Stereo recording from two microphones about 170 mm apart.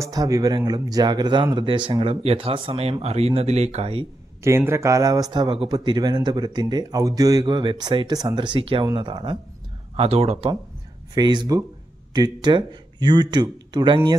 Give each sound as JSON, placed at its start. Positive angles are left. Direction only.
{"t": 0.0, "sound": "speech", "side_deg": -20}
{"t": 4.4, "sound": "speech", "side_deg": -15}
{"t": 9.9, "sound": "speech", "side_deg": -40}
{"t": 11.1, "sound": "speech", "side_deg": -25}